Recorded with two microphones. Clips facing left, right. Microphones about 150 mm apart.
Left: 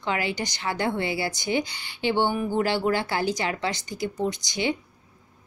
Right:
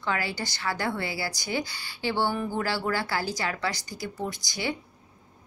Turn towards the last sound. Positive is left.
turn(degrees=20)  # may be behind; listen again after turning